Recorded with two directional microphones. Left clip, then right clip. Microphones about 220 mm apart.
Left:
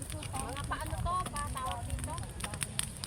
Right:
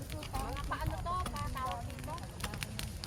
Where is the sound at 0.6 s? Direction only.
10° left (ahead or behind).